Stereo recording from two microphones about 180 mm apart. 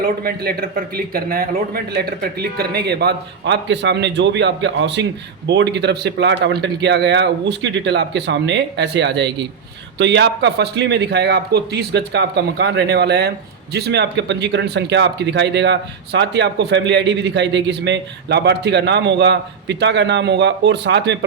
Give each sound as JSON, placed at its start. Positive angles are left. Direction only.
{"t": 0.0, "sound": "a man's voice", "side_deg": -55}